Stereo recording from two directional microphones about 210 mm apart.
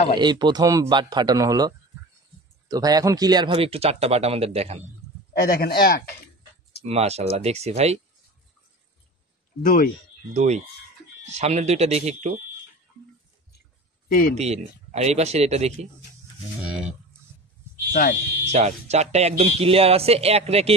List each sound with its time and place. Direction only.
0.2 s speech: 20° right (ahead or behind)
5.3 s speech: 45° left (ahead or behind)
6.9 s speech: 30° right (ahead or behind)
9.6 s speech: 40° left (ahead or behind)
10.3 s speech: 30° right (ahead or behind)
14.0 s speech: 45° left (ahead or behind)
14.3 s speech: 30° right (ahead or behind)
16.6 s a sound: 5° right (ahead or behind)
18.5 s speech: 30° right (ahead or behind)